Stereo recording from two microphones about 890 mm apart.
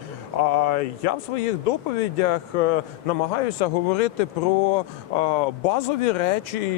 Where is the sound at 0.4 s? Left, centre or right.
Left.